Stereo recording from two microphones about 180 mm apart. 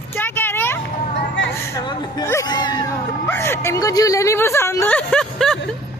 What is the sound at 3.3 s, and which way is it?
Speech, 15° left (ahead or behind).